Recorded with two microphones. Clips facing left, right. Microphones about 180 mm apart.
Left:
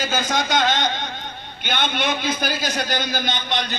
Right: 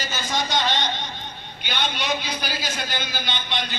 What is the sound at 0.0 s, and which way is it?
A man's voice, 50° left (ahead or behind).